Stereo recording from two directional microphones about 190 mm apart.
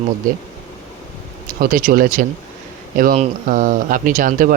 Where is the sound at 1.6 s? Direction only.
45° right (ahead or behind).